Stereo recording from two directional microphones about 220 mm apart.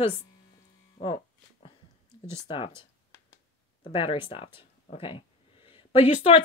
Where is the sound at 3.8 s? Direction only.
25° left (ahead or behind).